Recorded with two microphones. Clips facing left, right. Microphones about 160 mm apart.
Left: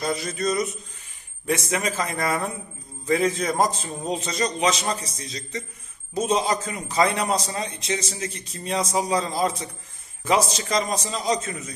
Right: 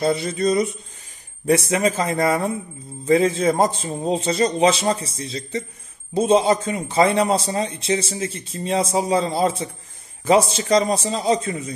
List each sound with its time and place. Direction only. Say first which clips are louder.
0.0 s a man's voice: right 6 dB; 30° right (ahead or behind)